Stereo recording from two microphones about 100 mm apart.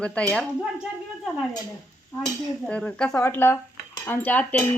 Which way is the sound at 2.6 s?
10° left (ahead or behind).